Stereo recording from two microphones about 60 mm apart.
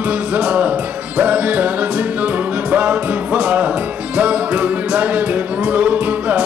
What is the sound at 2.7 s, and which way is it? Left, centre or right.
Music, right.